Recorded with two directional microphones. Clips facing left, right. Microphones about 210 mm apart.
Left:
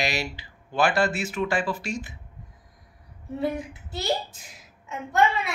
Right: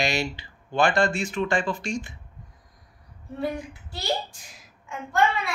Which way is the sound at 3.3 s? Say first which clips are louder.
Left 2 dB; 20° left (ahead or behind).